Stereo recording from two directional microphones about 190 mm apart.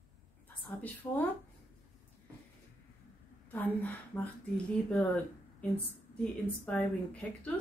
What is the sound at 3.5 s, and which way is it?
A woman's voice, 10° left (ahead or behind).